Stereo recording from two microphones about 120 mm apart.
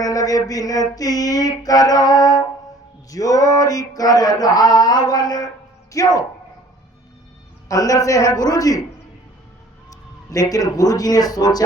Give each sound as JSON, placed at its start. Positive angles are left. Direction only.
{"t": 0.0, "sound": "a sound", "side_deg": 30}
{"t": 5.9, "sound": "a man's voice", "side_deg": 30}
{"t": 7.7, "sound": "a man's voice", "side_deg": 30}
{"t": 9.9, "sound": "a man's voice", "side_deg": 30}